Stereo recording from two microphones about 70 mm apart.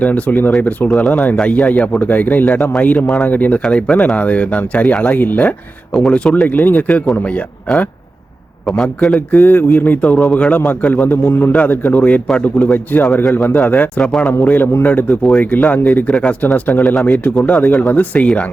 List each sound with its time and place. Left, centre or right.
0.0 s speech: left
8.6 s a man's voice: centre
9.3 s speech: left
14.0 s a man's voice: centre
14.4 s speech: left
17.3 s a man's voice: centre
17.6 s speech: left